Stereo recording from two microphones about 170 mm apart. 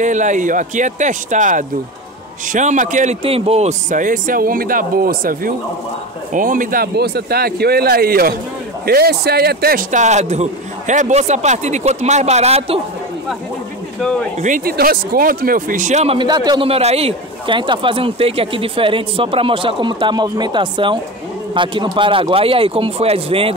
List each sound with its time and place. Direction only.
0.0 s a man's voice: 45° right (ahead or behind)
14.4 s speech: 55° right (ahead or behind)
16.2 s a man's voice: 25° right (ahead or behind)